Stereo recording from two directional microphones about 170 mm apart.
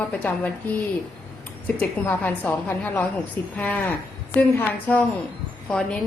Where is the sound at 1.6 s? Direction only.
10° left (ahead or behind).